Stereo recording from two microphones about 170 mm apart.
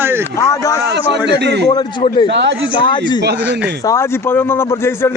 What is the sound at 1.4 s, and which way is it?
Speech, 90° right.